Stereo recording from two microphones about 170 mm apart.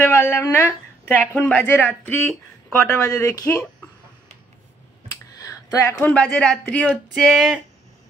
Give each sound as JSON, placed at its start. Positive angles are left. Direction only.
{"t": 0.0, "sound": "a woman's voice", "side_deg": 15}
{"t": 5.4, "sound": "a sound", "side_deg": 20}
{"t": 6.3, "sound": "speech", "side_deg": 5}